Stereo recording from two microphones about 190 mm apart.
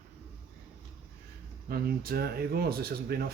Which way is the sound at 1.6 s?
55° right (ahead or behind).